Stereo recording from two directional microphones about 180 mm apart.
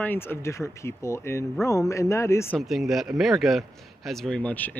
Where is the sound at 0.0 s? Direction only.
10° left (ahead or behind).